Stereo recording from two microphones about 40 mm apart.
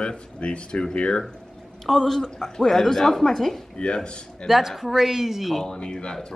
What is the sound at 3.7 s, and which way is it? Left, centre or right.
Speech, left.